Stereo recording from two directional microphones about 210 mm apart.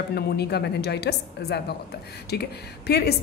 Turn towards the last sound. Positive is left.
turn(degrees=50)  # may be behind; listen again after turning